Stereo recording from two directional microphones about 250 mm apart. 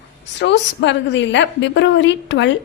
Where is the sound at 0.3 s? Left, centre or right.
Left.